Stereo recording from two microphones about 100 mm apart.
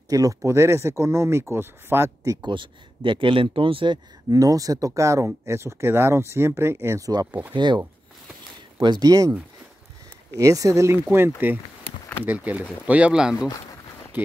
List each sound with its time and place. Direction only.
0.1 s speech: 35° right (ahead or behind)
2.4 s speech: 55° right (ahead or behind)
4.3 s speech: 35° right (ahead or behind); by 7.5 s 15° right (ahead or behind)
7.5 s speech: 50° right (ahead or behind)
8.8 s speech: 45° right (ahead or behind)
10.3 s speech: 35° right (ahead or behind); by 13.5 s 10° right (ahead or behind)
14.1 s speech: 20° right (ahead or behind)